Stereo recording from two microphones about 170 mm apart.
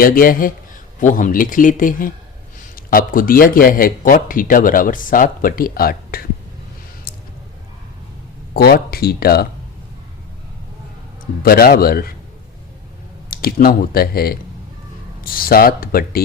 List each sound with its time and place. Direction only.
0.0 s a man's voice: 55° left (ahead or behind)
8.5 s a man's voice: 65° left (ahead or behind)
11.4 s a man's voice: 65° left (ahead or behind)
13.3 s a man's voice: 60° left (ahead or behind)